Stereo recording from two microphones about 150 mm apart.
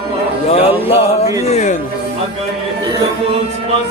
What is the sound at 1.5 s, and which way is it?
Speech, 50° left (ahead or behind).